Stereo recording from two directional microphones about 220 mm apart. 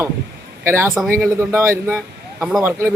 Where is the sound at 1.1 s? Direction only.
10° right (ahead or behind).